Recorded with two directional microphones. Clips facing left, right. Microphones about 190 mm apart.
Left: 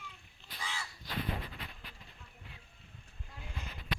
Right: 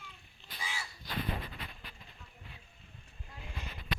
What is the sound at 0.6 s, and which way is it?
Crow, 10° right (ahead or behind).